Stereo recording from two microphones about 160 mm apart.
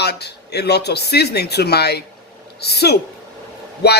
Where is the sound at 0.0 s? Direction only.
90° left.